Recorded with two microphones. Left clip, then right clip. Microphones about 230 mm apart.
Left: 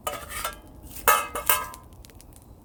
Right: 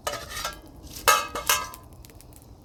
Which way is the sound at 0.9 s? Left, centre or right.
Centre.